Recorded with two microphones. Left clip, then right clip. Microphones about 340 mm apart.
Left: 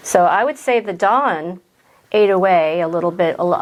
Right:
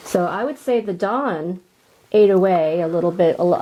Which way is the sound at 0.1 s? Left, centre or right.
Left.